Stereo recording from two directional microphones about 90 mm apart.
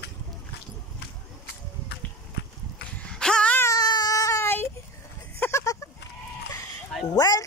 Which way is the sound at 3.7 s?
50° left (ahead or behind).